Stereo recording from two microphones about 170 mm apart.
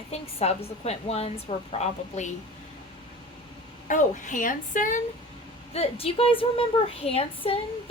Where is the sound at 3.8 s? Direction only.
50° left (ahead or behind).